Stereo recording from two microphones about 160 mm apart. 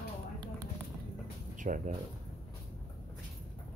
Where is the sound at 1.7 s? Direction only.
55° right (ahead or behind).